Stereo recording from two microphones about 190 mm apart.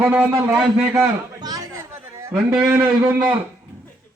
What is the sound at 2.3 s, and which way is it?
Speech, 5° right (ahead or behind).